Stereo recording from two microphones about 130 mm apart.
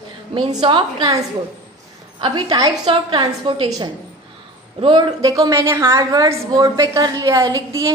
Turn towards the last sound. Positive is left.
turn(degrees=-30)  # may be behind; listen again after turning